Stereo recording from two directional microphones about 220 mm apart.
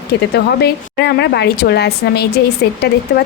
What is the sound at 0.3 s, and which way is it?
A woman's voice, 50° left (ahead or behind).